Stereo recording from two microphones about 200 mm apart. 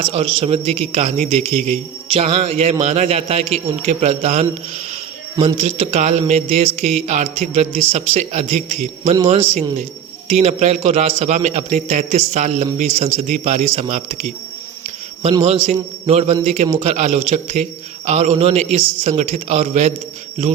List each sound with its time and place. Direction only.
0.0 s a man's voice: 30° right (ahead or behind)
10.4 s a man's voice: 35° right (ahead or behind)
14.8 s cricket: 35° right (ahead or behind)
15.4 s a man's voice: 30° right (ahead or behind)